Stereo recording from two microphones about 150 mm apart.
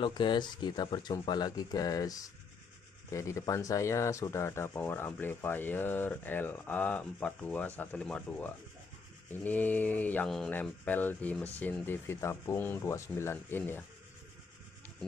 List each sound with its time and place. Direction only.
0.0 s speech: 30° left (ahead or behind); by 13.8 s 15° left (ahead or behind)